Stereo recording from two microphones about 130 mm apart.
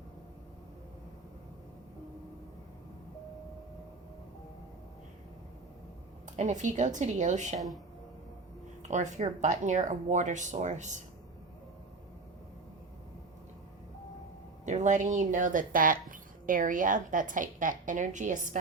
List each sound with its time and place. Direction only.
6.2 s speech: 65° right (ahead or behind)
8.8 s speech: 65° right (ahead or behind)
14.6 s speech: 65° right (ahead or behind)